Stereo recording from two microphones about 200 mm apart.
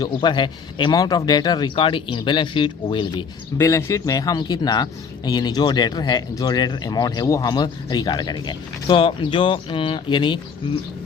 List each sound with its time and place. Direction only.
0.0 s speech: 25° left (ahead or behind)